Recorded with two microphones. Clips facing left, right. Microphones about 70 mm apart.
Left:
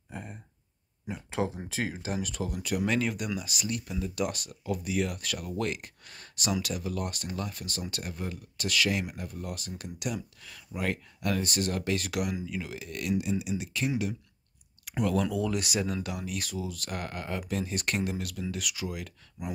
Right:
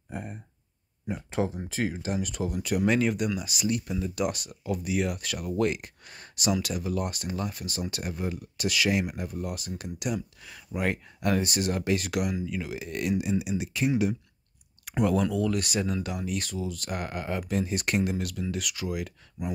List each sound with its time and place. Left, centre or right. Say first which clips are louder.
0.1 s speech: right 4 dB; centre
1.3 s speech: right 1 dB; centre
12.7 s speech: right 2 dB; right
15.2 s speech: right 3 dB; centre
18.9 s speech: right 5 dB; centre